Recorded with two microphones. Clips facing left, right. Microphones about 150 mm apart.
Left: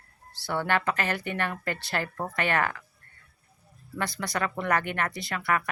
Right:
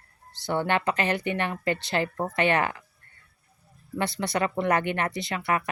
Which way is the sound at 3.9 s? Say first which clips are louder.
Right 4 dB; 25° right (ahead or behind).